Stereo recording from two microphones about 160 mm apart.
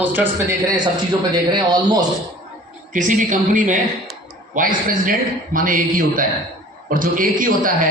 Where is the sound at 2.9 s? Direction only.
50° right (ahead or behind).